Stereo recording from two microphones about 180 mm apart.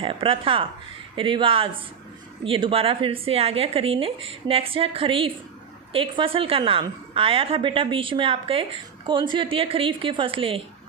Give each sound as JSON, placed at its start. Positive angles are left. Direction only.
{"t": 0.0, "sound": "a woman's voice", "side_deg": -30}